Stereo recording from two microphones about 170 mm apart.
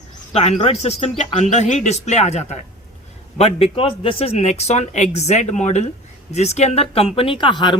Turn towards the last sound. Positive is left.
turn(degrees=30)  # may be behind; listen again after turning